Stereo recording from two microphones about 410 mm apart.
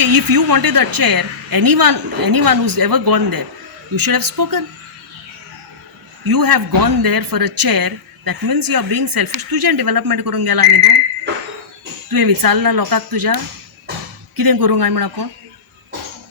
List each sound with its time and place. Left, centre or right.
0.0 s a woman's voice: right
6.2 s speech: right
12.1 s speech: right